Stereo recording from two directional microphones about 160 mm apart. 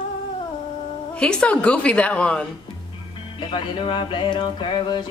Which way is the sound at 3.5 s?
30° left (ahead or behind).